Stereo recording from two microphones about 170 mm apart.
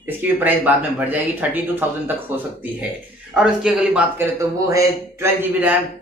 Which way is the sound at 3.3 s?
5° right (ahead or behind).